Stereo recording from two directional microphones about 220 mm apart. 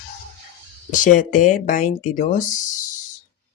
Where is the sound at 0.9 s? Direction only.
35° left (ahead or behind).